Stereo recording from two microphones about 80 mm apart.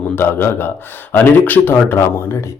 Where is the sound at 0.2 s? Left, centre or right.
Left.